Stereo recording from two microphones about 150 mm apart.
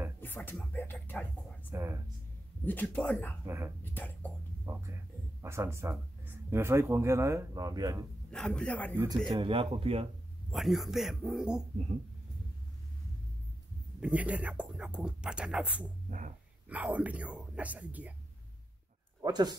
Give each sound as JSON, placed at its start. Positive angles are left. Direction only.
{"t": 0.2, "sound": "speech", "side_deg": 15}
{"t": 1.7, "sound": "speech", "side_deg": -15}
{"t": 2.6, "sound": "speech", "side_deg": 10}
{"t": 3.4, "sound": "speech", "side_deg": -15}
{"t": 3.8, "sound": "speech", "side_deg": 10}
{"t": 4.7, "sound": "speech", "side_deg": -20}
{"t": 8.3, "sound": "speech", "side_deg": 5}
{"t": 8.9, "sound": "speech", "side_deg": -25}
{"t": 9.3, "sound": "speech", "side_deg": -35}
{"t": 10.5, "sound": "speech", "side_deg": 0}
{"t": 14.0, "sound": "speech", "side_deg": -10}
{"t": 16.1, "sound": "speech", "side_deg": -55}
{"t": 16.6, "sound": "speech", "side_deg": -10}
{"t": 19.2, "sound": "speech", "side_deg": -25}